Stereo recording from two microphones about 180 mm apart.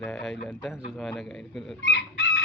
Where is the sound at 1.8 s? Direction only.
85° left.